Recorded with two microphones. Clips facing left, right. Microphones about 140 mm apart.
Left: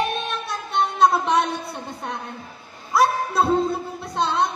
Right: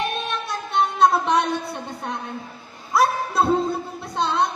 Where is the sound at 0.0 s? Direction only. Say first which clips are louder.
Left 1 dB; centre (ahead or behind).